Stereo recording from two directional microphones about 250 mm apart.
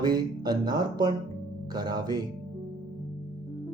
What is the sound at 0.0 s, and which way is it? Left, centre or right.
Speech, centre.